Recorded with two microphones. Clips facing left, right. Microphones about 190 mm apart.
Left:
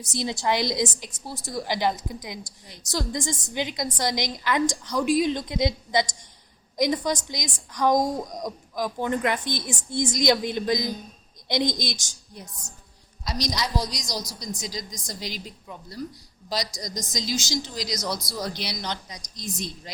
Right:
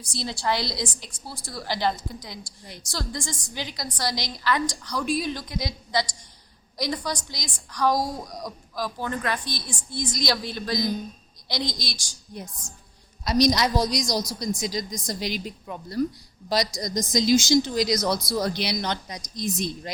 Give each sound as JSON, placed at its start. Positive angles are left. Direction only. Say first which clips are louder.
{"t": 0.0, "sound": "a woman's voice", "louder": "left 2 dB", "side_deg": 20}
{"t": 13.2, "sound": "a woman's voice", "louder": "right 8 dB", "side_deg": -60}